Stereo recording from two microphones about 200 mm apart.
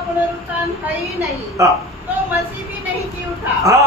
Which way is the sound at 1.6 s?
15° right (ahead or behind).